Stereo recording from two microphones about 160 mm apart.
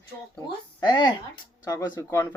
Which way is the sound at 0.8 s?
30° left (ahead or behind).